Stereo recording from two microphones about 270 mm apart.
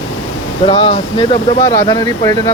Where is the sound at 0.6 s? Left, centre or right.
Centre.